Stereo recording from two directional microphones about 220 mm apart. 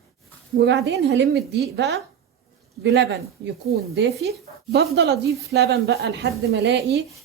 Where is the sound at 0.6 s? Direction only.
50° right (ahead or behind).